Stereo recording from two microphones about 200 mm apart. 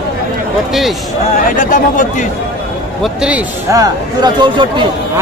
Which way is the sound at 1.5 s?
40° left (ahead or behind).